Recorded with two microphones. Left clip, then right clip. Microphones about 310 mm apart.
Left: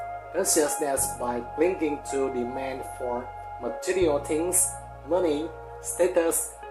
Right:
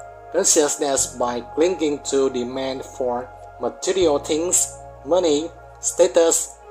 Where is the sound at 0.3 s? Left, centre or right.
Right.